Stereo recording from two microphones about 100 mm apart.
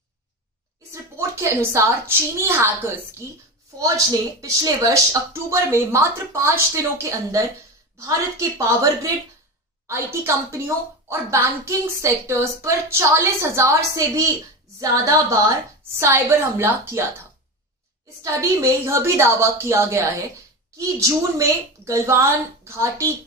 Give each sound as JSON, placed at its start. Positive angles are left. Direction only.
{"t": 0.9, "sound": "a woman's voice", "side_deg": -30}